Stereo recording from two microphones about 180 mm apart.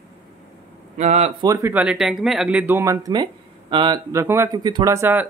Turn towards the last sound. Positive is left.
turn(degrees=-10)  # may be behind; listen again after turning